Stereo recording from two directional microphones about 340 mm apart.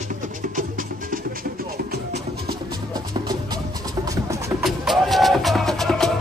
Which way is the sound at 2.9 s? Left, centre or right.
Centre.